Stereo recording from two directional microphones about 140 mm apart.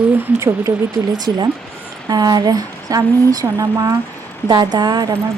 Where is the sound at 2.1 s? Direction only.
30° right (ahead or behind).